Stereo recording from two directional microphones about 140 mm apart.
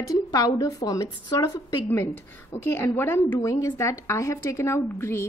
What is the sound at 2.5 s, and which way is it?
A woman's voice, 15° left (ahead or behind).